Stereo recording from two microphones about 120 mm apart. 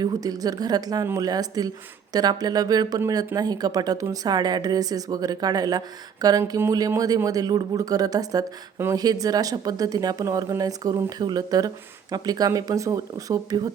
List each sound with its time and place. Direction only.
0.0 s speech: 30° right (ahead or behind)